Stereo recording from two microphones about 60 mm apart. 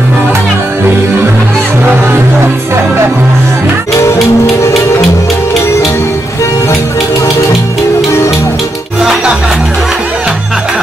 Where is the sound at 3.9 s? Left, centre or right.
Left.